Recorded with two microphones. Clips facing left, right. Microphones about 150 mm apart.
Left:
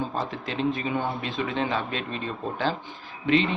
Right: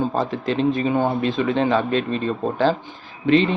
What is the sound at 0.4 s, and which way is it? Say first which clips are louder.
Speech: right 7 dB; 35° right (ahead or behind).